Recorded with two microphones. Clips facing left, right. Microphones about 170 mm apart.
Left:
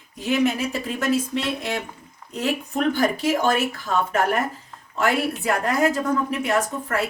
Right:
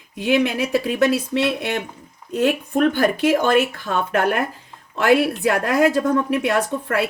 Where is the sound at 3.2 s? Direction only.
60° right (ahead or behind).